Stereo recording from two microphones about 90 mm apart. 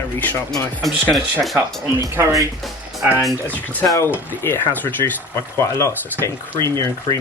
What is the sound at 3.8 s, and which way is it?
Speech, 30° left (ahead or behind).